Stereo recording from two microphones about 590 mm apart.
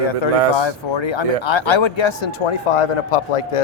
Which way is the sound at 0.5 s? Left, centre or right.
Left.